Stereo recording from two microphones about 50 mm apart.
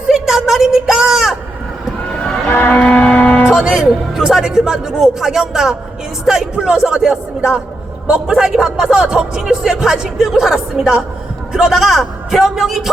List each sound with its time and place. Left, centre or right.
0.1 s a sound: centre
2.5 s music: left
3.5 s music: centre
4.3 s a man's voice: centre